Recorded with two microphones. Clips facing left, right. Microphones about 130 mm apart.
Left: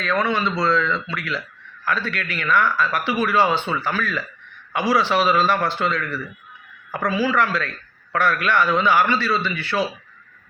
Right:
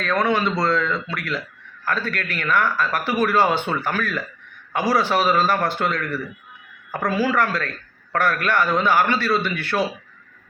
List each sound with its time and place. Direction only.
0.0 s a man's voice: 45° right (ahead or behind)